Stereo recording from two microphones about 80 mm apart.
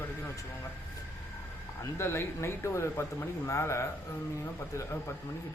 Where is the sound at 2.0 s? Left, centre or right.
Left.